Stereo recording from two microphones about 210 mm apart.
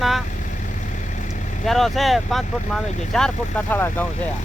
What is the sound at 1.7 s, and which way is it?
Speech, centre (ahead or behind).